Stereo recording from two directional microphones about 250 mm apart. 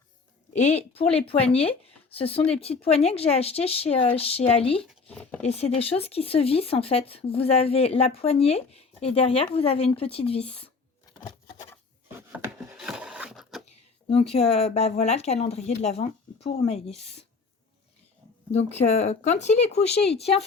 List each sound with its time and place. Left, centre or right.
0.5 s speech: left
4.9 s speech: centre
5.5 s speech: left
10.5 s a sound: left
12.0 s wood: centre
13.7 s a sound: left
14.3 s speech: left
18.9 s speech: left